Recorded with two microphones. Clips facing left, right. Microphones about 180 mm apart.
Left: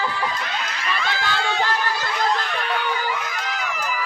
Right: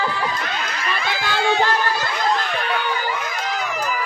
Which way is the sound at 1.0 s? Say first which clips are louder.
Even; 10° right (ahead or behind).